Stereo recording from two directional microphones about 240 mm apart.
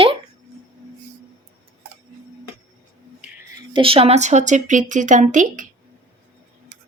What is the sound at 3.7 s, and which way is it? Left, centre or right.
Speech, right.